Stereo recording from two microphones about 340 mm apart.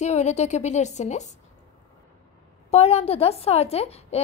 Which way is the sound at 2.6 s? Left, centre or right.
Centre.